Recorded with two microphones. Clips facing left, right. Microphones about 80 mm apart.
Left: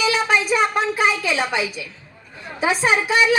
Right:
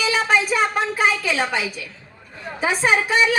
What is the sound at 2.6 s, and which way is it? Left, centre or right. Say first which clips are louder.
Speech: left 1 dB; centre.